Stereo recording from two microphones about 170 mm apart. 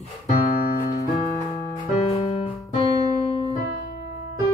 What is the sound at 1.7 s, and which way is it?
Music, 40° left (ahead or behind).